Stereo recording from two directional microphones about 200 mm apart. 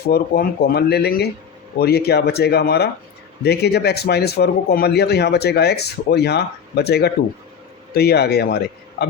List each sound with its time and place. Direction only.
0.1 s a man's voice: 50° left (ahead or behind)